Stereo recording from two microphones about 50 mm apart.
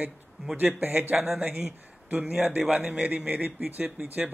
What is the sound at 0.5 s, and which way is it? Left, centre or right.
Speech, right.